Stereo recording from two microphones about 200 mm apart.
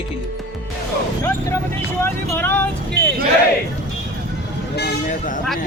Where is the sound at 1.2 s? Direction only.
15° left (ahead or behind).